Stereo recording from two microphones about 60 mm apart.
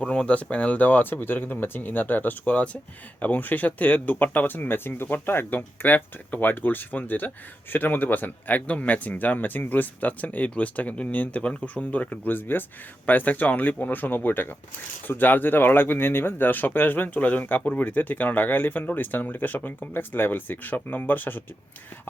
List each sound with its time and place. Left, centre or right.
0.0 s speech: centre